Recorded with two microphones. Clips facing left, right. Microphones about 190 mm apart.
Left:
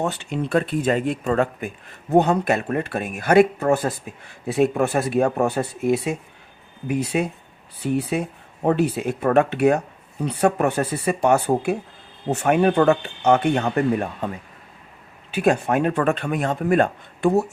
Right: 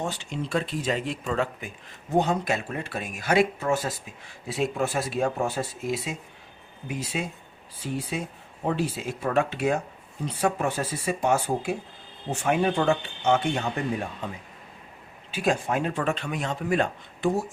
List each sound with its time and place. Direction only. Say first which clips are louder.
0.0 s speech: left 6 dB; 60° left (ahead or behind)